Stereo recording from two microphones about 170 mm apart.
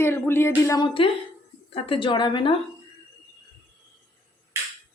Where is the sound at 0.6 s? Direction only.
25° left (ahead or behind).